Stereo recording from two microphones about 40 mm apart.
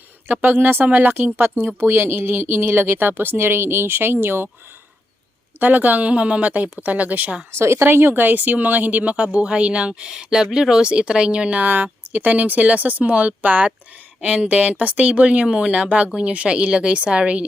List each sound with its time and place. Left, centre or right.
0.3 s a woman's voice: right
5.5 s speech: right
7.9 s speech: right
11.6 s speech: right